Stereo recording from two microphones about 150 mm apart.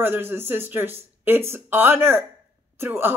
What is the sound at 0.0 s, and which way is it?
Speech, 15° right (ahead or behind).